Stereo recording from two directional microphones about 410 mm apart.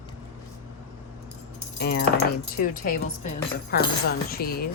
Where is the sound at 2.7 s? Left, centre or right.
Left.